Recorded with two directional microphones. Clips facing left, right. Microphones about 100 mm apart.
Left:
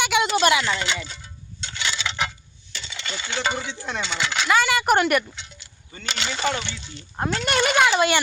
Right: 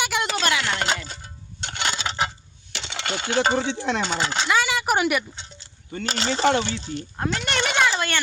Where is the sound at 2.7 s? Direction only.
75° right (ahead or behind); by 3.8 s 30° right (ahead or behind).